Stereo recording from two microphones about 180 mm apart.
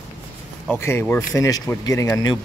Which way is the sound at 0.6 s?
15° left (ahead or behind).